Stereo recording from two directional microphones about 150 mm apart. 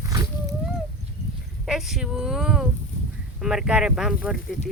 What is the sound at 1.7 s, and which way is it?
Speech, 5° right (ahead or behind).